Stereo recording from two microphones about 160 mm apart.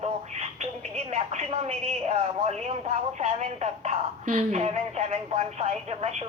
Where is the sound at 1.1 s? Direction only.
45° right (ahead or behind).